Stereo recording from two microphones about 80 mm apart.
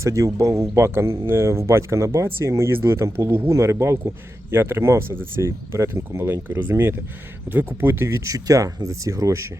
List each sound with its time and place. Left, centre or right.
0.0 s speech: right